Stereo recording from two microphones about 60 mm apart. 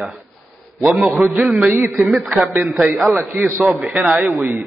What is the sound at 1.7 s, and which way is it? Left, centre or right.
Speech, right.